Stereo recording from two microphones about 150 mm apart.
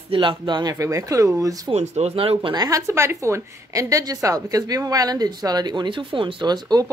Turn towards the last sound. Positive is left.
turn(degrees=-25)  # may be behind; listen again after turning